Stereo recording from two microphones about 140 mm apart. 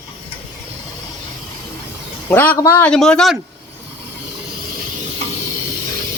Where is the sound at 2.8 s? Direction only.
5° left (ahead or behind).